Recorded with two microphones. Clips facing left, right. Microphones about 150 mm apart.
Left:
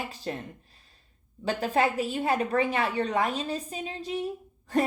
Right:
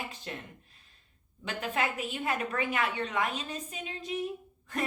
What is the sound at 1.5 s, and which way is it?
A woman's voice, 35° left (ahead or behind).